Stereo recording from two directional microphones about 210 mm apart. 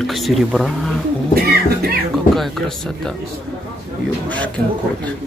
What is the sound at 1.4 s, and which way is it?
Music, 45° right (ahead or behind).